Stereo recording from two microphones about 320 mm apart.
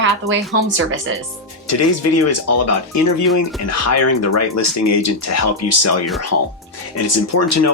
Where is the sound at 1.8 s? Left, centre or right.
Left.